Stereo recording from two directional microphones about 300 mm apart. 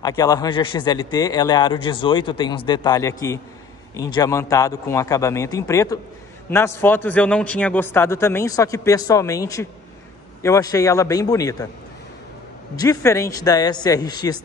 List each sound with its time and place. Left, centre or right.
0.0 s a man's voice: centre
12.7 s a man's voice: centre